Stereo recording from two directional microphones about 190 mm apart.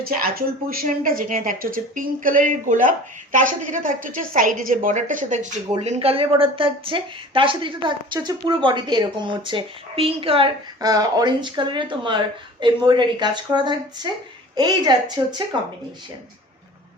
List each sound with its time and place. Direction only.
0.0 s a woman's voice: 50° right (ahead or behind); by 15.4 s 25° right (ahead or behind)